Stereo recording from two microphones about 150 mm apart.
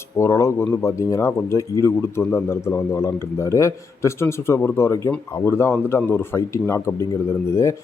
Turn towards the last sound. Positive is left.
turn(degrees=20)  # may be behind; listen again after turning